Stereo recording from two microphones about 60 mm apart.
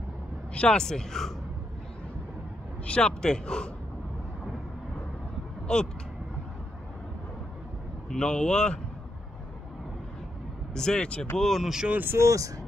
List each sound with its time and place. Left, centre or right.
0.6 s speech: centre
2.9 s speech: centre
5.7 s speech: centre
8.1 s speech: centre
10.7 s speech: centre
11.3 s speech: centre
11.9 s speech: right
12.2 s speech: right